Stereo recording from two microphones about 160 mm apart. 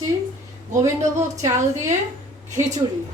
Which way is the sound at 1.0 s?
50° right (ahead or behind).